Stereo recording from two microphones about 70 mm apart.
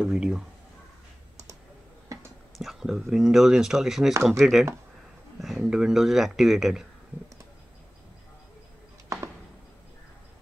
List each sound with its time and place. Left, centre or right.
0.0 s speech: centre
2.1 s a sound: right
2.6 s speech: centre